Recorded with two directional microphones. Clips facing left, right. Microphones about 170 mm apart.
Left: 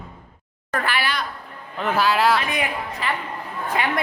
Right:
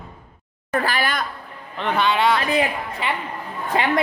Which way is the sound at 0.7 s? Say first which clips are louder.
Right 2 dB; 35° right (ahead or behind).